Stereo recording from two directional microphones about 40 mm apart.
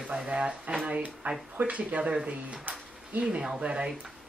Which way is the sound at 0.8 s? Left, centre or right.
Right.